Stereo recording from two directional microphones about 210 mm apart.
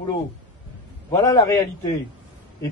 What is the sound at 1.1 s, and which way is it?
Speech, 15° left (ahead or behind).